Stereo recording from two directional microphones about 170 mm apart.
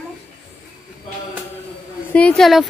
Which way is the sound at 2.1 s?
5° left (ahead or behind).